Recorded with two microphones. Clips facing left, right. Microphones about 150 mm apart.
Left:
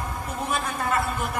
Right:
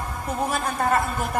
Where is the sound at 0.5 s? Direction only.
45° right (ahead or behind).